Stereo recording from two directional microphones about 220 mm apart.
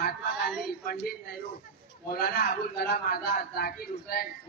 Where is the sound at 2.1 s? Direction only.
45° left (ahead or behind).